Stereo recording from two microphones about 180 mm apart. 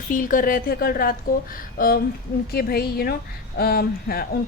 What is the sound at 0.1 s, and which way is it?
A woman's voice, 50° left (ahead or behind).